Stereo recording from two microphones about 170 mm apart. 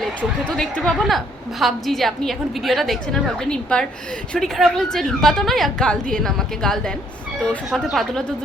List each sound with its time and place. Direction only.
0.0 s a woman's voice: 5° left (ahead or behind)